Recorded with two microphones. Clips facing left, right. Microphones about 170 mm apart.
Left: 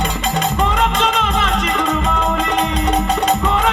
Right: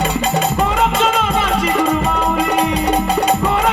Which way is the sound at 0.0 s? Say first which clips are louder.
Right 3 dB; 10° right (ahead or behind).